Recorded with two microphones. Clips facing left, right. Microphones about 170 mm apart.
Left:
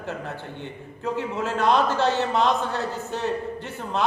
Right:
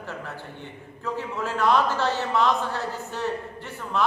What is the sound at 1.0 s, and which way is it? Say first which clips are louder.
A man's voice: left 3 dB; 20° left (ahead or behind).